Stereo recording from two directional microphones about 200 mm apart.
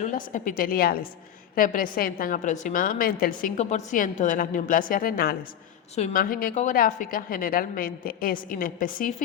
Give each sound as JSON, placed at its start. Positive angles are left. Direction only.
{"t": 0.0, "sound": "a woman's voice", "side_deg": 40}